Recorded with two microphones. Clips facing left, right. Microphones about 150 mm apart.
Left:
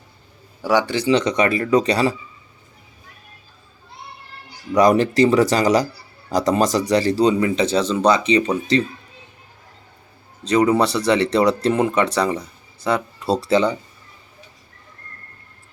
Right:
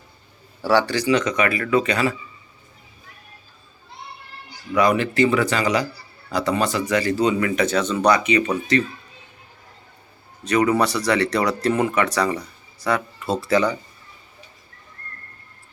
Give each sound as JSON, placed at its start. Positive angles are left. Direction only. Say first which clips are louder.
{"t": 0.6, "sound": "speech", "louder": "even", "side_deg": 15}
{"t": 4.7, "sound": "speech", "louder": "left 4 dB", "side_deg": 40}
{"t": 10.4, "sound": "speech", "louder": "left 2 dB", "side_deg": 30}